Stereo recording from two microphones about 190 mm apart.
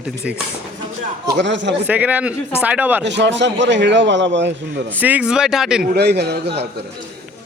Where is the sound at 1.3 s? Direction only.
70° right (ahead or behind).